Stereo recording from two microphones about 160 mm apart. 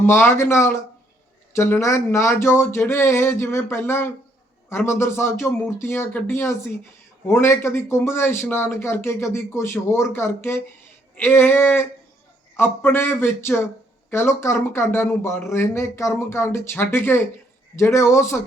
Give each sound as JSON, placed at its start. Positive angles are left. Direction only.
{"t": 0.0, "sound": "speech", "side_deg": 15}